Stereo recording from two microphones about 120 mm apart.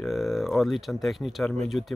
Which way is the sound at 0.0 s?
Centre (ahead or behind).